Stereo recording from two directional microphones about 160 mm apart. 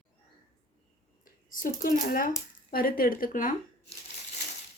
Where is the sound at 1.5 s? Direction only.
55° left (ahead or behind).